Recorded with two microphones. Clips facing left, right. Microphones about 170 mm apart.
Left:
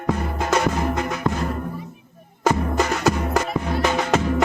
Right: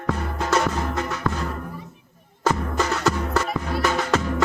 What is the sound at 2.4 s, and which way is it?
Music, 15° left (ahead or behind).